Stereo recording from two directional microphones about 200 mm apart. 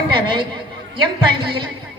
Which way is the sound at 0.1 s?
25° right (ahead or behind).